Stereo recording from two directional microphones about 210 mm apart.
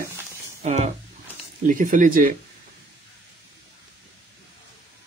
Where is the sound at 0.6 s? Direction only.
30° right (ahead or behind).